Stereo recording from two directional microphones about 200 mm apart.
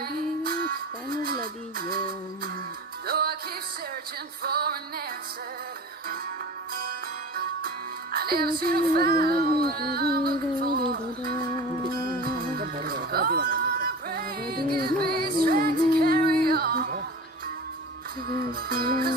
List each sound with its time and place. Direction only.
0.0 s music: 45° right (ahead or behind)
3.1 s music: 50° right (ahead or behind)
4.4 s music: 50° right (ahead or behind)
6.7 s music: 45° right (ahead or behind)
18.7 s music: 50° right (ahead or behind)